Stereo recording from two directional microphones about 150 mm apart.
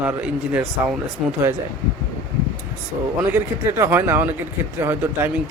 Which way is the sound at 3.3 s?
15° right (ahead or behind).